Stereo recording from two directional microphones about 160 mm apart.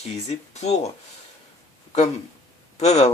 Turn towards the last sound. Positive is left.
turn(degrees=45)  # may be behind; listen again after turning